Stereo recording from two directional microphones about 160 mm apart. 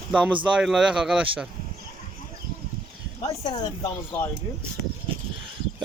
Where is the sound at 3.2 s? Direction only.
30° left (ahead or behind).